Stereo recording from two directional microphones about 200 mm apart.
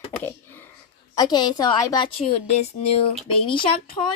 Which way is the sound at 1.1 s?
20° left (ahead or behind).